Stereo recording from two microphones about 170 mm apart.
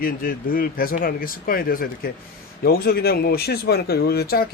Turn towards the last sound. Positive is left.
turn(degrees=65)  # may be behind; listen again after turning